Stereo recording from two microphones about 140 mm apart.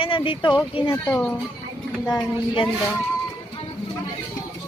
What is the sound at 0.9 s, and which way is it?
Child singing, 15° left (ahead or behind).